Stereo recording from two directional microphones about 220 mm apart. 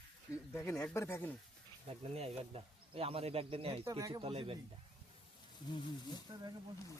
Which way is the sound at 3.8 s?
15° right (ahead or behind).